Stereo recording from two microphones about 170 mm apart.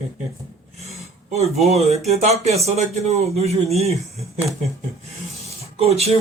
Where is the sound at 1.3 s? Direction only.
40° right (ahead or behind).